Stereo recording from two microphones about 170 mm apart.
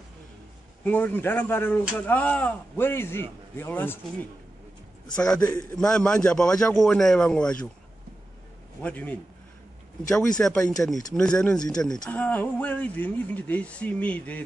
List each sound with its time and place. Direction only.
0.8 s a man's voice: 10° left (ahead or behind)
5.4 s a man's voice: 25° left (ahead or behind)
5.7 s a man's voice: 5° left (ahead or behind)
8.8 s speech: 10° left (ahead or behind)
10.4 s a man's voice: 5° left (ahead or behind)